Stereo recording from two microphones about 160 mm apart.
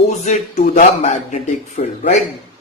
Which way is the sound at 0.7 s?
50° left (ahead or behind).